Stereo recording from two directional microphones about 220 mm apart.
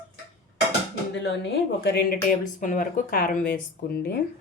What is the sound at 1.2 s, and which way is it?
Speech, 50° left (ahead or behind).